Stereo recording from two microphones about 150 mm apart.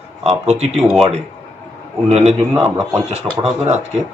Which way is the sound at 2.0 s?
45° right (ahead or behind).